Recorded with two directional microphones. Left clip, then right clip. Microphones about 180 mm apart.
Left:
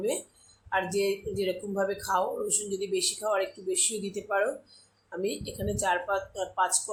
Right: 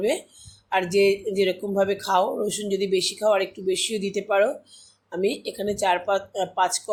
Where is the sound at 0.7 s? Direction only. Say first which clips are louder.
Right 8 dB; 40° right (ahead or behind).